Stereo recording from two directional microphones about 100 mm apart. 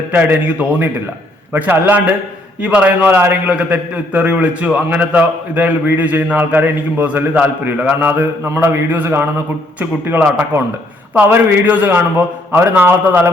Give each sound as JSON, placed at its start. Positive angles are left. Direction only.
{"t": 0.1, "sound": "a man's voice", "side_deg": -15}